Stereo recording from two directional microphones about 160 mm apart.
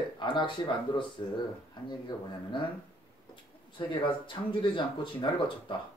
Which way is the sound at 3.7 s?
30° left (ahead or behind).